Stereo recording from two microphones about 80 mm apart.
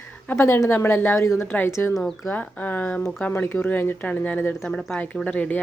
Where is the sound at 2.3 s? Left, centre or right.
Left.